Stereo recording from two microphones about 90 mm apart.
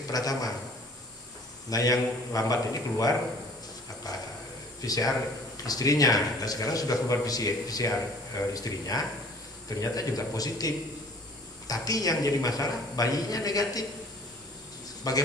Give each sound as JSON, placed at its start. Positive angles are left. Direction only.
{"t": 0.1, "sound": "a man's voice", "side_deg": 45}
{"t": 1.7, "sound": "a man's voice", "side_deg": 40}
{"t": 4.1, "sound": "a sound", "side_deg": 45}
{"t": 4.8, "sound": "a man's voice", "side_deg": 45}
{"t": 15.1, "sound": "a man's voice", "side_deg": 45}